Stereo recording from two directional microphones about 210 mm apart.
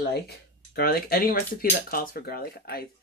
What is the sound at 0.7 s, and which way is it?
Speech, 45° left (ahead or behind).